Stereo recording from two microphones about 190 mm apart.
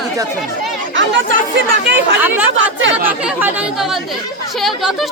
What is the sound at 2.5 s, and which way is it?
Speech, 90° right.